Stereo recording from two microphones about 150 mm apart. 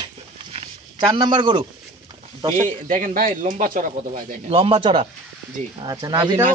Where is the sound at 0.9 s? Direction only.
30° right (ahead or behind).